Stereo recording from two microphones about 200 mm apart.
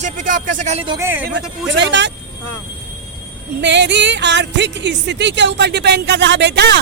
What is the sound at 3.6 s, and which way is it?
Speech, 60° right (ahead or behind).